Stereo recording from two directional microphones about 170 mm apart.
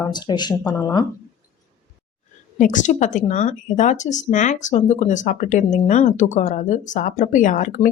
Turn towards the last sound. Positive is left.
turn(degrees=45)  # may be behind; listen again after turning